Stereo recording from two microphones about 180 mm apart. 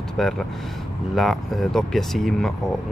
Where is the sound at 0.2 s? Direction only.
Centre (ahead or behind).